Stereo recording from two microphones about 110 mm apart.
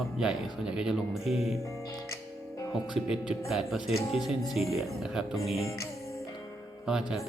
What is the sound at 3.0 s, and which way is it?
Speech, 70° left (ahead or behind).